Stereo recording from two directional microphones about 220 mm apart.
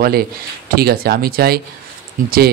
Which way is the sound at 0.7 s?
45° right (ahead or behind).